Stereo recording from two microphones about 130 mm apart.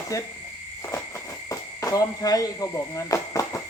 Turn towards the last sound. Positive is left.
turn(degrees=25)  # may be behind; listen again after turning